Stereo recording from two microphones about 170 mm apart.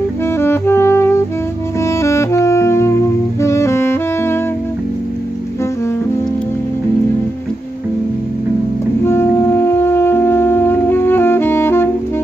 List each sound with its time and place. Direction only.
0.4 s music: 15° left (ahead or behind)
2.0 s saxophone: 15° left (ahead or behind)
9.0 s brass instrument: 15° left (ahead or behind)